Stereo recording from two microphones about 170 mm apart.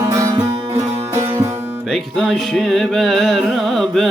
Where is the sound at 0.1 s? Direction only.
20° right (ahead or behind).